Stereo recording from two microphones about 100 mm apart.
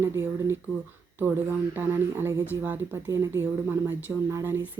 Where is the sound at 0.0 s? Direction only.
25° right (ahead or behind).